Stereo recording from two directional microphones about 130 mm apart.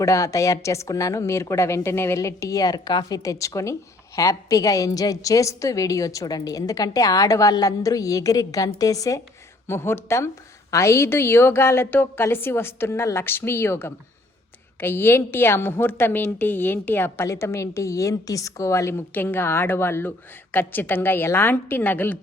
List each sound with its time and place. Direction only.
0.0 s a woman's voice: 25° left (ahead or behind)